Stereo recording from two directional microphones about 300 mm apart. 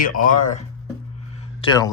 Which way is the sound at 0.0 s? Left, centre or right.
Left.